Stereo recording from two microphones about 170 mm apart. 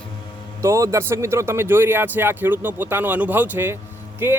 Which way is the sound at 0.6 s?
20° right (ahead or behind).